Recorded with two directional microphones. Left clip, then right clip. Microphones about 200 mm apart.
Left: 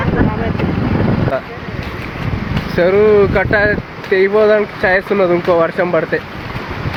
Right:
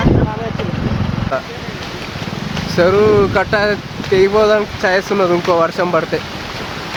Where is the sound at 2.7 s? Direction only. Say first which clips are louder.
Left 1 dB; centre (ahead or behind).